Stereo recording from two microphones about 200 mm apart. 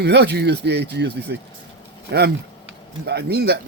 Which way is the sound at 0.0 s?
55° right (ahead or behind).